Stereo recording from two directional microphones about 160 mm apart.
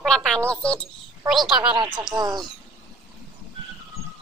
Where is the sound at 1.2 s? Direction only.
20° right (ahead or behind).